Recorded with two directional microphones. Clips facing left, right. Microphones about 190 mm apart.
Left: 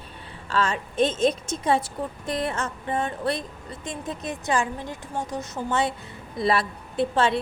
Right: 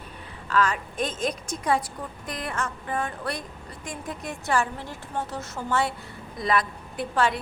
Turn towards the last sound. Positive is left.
turn(degrees=25)  # may be behind; listen again after turning